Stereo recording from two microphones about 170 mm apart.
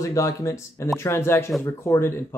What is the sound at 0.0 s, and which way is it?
Speech, 20° left (ahead or behind).